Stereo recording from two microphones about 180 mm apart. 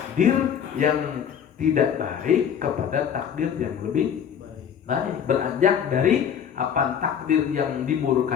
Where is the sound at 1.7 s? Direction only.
45° right (ahead or behind).